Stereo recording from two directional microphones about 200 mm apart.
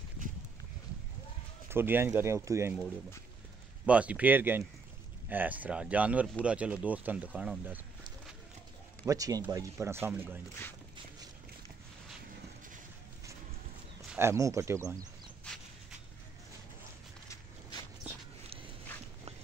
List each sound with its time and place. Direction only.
1.7 s speech: 10° right (ahead or behind)
3.8 s speech: 5° right (ahead or behind)
9.0 s speech: 15° right (ahead or behind)
14.1 s speech: 15° right (ahead or behind)
17.3 s walk: 20° left (ahead or behind)